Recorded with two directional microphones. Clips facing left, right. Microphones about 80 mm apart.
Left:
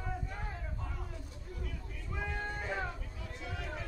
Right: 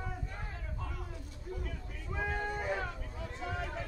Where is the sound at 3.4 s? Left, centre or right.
Right.